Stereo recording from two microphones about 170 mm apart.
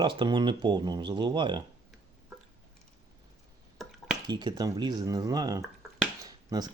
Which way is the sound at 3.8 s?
Centre (ahead or behind).